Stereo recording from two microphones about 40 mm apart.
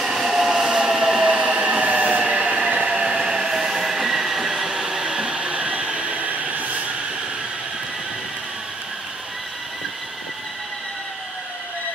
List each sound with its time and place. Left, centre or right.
0.0 s train: centre
1.2 s train: right
2.9 s train: centre; by 6.9 s right